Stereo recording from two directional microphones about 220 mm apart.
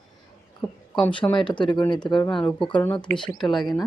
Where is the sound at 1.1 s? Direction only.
20° left (ahead or behind).